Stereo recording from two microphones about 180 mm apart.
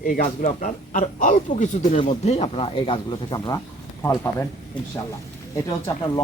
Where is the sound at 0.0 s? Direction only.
50° left (ahead or behind); by 3.6 s 25° left (ahead or behind).